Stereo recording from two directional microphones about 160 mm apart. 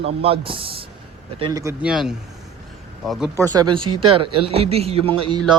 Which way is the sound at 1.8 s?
5° right (ahead or behind).